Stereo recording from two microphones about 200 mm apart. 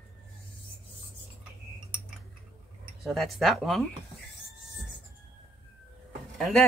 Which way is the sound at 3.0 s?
Centre (ahead or behind).